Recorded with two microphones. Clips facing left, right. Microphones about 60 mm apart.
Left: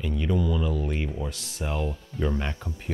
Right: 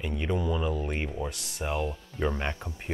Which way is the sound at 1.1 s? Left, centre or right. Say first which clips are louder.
Left 1 dB; centre.